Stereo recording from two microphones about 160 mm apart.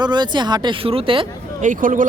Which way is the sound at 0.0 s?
25° right (ahead or behind).